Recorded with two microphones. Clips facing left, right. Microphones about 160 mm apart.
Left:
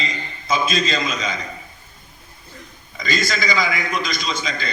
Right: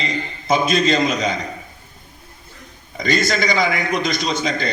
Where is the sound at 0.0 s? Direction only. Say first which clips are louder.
Right 4 dB; 60° right (ahead or behind).